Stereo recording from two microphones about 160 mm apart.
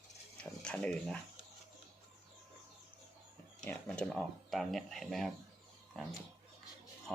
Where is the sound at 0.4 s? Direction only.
5° left (ahead or behind).